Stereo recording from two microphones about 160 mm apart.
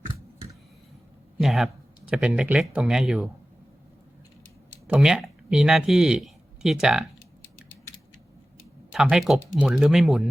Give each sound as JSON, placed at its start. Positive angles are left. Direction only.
{"t": 1.4, "sound": "speech", "side_deg": 0}
{"t": 4.9, "sound": "speech", "side_deg": -5}
{"t": 8.9, "sound": "speech", "side_deg": -5}